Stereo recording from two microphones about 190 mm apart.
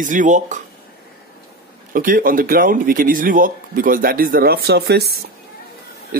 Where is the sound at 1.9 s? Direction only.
45° right (ahead or behind).